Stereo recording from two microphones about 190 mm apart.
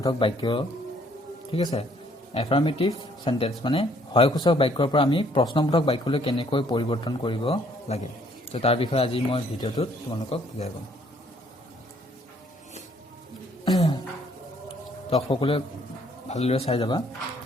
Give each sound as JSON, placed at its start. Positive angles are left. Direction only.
{"t": 0.0, "sound": "speech", "side_deg": 25}
{"t": 13.7, "sound": "a sound", "side_deg": 20}
{"t": 16.3, "sound": "speech", "side_deg": 35}